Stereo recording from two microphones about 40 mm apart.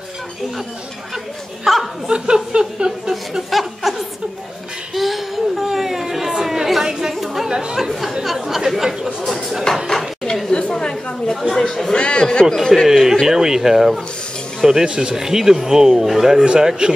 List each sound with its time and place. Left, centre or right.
1.7 s speech: centre
2.0 s a sound: right
3.4 s chuckle: centre
4.9 s chatter: centre
8.2 s speech: centre
10.5 s chatter: centre
11.9 s a man's voice: left
12.8 s speech: centre
13.3 s speech: centre